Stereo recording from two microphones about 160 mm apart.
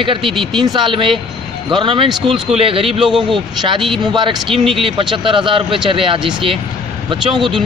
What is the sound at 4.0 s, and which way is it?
Speech, 30° right (ahead or behind).